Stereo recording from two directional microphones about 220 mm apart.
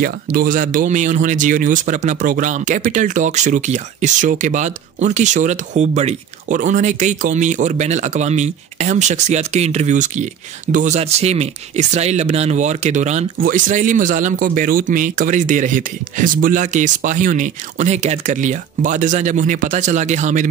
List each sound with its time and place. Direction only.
0.0 s speech: 40° right (ahead or behind)